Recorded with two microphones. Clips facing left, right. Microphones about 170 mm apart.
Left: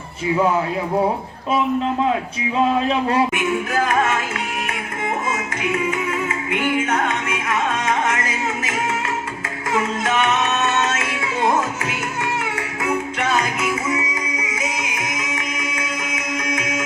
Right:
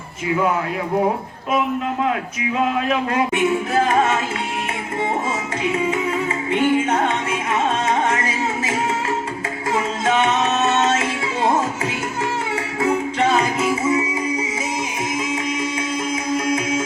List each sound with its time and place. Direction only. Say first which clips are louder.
2.9 s a man's voice: left 1 dB; 30° left (ahead or behind)
3.3 s music: right 3 dB; 30° right (ahead or behind)
5.7 s music: right 1 dB; 30° right (ahead or behind)
10.1 s music: right 3 dB; 30° right (ahead or behind)
12.8 s music: right 4 dB; 30° right (ahead or behind)